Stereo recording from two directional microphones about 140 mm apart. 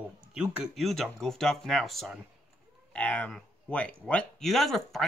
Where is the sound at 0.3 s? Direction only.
5° right (ahead or behind).